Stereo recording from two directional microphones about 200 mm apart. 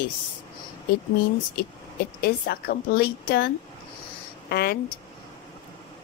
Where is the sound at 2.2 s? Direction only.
50° left (ahead or behind).